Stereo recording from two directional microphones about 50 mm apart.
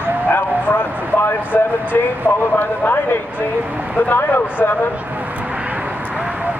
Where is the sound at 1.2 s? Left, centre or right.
Left.